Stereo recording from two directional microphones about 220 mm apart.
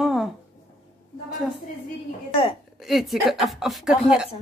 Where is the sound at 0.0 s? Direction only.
Centre (ahead or behind).